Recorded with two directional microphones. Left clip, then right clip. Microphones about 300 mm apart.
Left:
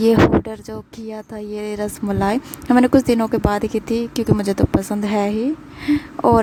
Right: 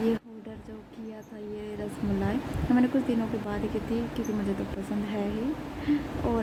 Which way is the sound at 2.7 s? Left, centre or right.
Left.